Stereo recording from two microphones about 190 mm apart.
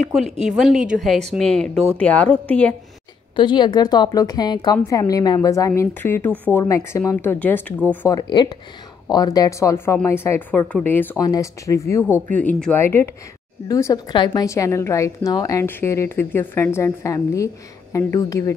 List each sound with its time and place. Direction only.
0.5 s a woman's voice: 5° right (ahead or behind)
3.3 s a woman's voice: 25° left (ahead or behind)
8.2 s a woman's voice: 25° left (ahead or behind)